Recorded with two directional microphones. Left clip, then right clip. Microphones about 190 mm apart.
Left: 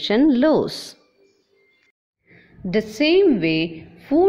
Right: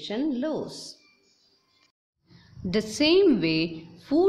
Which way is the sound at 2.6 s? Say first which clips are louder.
Left 4 dB; 5° left (ahead or behind).